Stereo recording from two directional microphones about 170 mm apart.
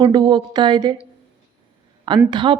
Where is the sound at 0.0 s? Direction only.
25° right (ahead or behind).